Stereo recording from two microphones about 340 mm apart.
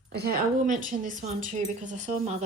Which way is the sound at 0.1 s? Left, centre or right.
Right.